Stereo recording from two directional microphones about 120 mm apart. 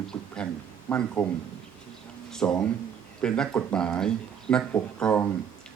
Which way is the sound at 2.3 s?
5° left (ahead or behind).